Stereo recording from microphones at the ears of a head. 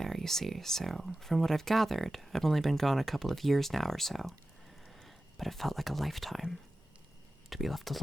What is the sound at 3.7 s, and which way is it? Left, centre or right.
Speech, centre.